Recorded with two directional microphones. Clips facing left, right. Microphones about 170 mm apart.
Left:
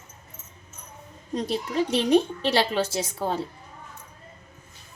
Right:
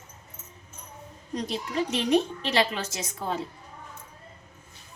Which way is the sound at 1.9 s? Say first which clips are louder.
Left 3 dB; 30° left (ahead or behind).